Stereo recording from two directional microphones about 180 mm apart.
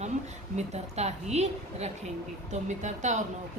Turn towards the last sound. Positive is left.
turn(degrees=-40)  # may be behind; listen again after turning